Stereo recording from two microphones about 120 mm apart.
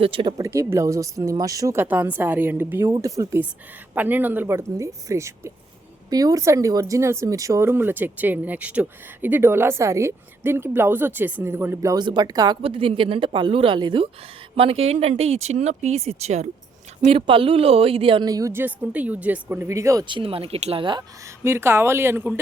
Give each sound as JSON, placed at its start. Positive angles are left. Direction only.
{"t": 0.0, "sound": "speech", "side_deg": -45}
{"t": 0.3, "sound": "speech", "side_deg": -25}
{"t": 2.8, "sound": "speech", "side_deg": -25}
{"t": 3.9, "sound": "speech", "side_deg": -15}
{"t": 12.0, "sound": "speech", "side_deg": -40}
{"t": 12.6, "sound": "speech", "side_deg": -50}
{"t": 14.5, "sound": "speech", "side_deg": -55}
{"t": 17.1, "sound": "speech", "side_deg": -45}
{"t": 18.3, "sound": "speech", "side_deg": -30}
{"t": 18.5, "sound": "speech", "side_deg": -15}
{"t": 20.1, "sound": "speech", "side_deg": -45}
{"t": 21.4, "sound": "speech", "side_deg": -20}